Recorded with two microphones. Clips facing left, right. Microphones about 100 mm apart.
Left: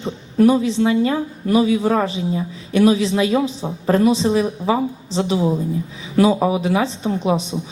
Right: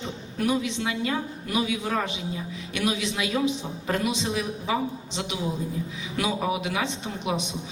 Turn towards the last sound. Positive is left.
turn(degrees=35)  # may be behind; listen again after turning